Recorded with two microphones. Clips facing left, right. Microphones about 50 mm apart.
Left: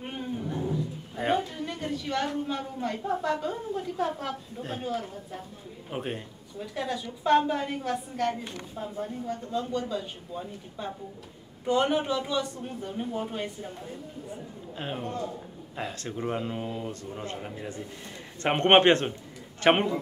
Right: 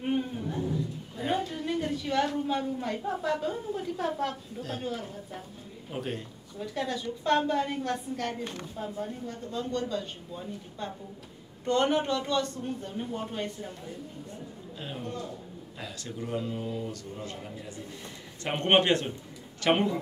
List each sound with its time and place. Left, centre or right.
0.0 s a sound: centre
1.3 s a woman's voice: centre
4.6 s a man's voice: left
4.8 s speech: centre
5.9 s a man's voice: left
6.6 s a woman's voice: centre
14.8 s a man's voice: left